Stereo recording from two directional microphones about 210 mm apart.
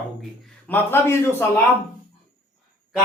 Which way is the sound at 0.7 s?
10° left (ahead or behind).